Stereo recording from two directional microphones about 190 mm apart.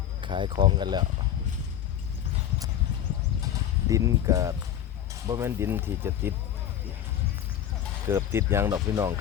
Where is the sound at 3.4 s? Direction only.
15° right (ahead or behind).